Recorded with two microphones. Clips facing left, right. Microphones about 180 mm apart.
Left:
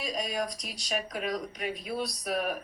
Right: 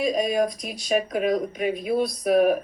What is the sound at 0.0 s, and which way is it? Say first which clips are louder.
Speech: right 10 dB; 50° right (ahead or behind).